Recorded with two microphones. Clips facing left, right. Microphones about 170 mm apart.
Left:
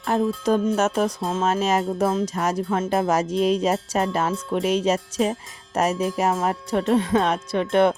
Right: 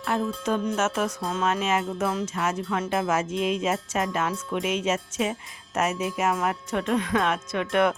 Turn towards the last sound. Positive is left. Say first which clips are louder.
# left 4 dB
turn(degrees=30)  # may be behind; listen again after turning